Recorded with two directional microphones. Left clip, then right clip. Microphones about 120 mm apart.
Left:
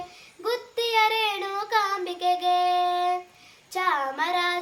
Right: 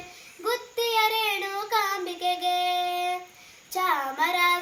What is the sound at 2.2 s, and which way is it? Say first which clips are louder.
Child singing: left 3 dB; 45° left (ahead or behind).